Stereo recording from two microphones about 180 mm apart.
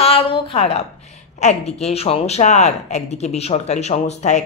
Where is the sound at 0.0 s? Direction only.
30° left (ahead or behind).